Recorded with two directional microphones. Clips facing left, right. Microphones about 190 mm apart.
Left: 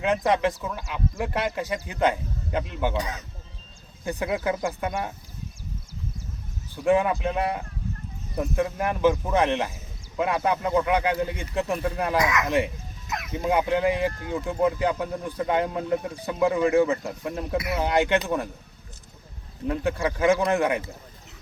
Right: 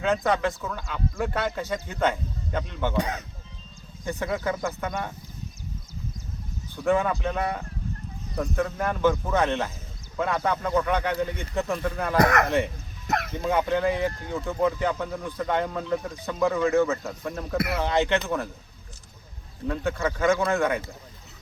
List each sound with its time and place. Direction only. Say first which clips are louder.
0.0 s speech: left 1 dB; 15° left (ahead or behind)
4.2 s speech: left 2 dB; 15° left (ahead or behind)
6.7 s speech: left 2 dB; 15° left (ahead or behind)
12.1 s speech: right 5 dB; 60° right (ahead or behind)
13.1 s a sound: right 6 dB; 65° right (ahead or behind)
13.3 s speech: left 3 dB; 15° left (ahead or behind)
19.6 s speech: left 1 dB; 15° left (ahead or behind)